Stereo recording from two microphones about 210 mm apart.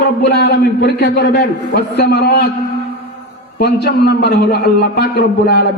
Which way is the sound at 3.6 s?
50° left (ahead or behind).